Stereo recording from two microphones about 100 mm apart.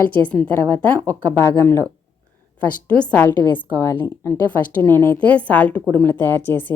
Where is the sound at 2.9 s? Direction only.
10° left (ahead or behind); by 4.0 s 30° left (ahead or behind).